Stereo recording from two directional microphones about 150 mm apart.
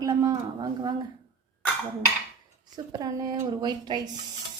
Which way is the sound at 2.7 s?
25° right (ahead or behind).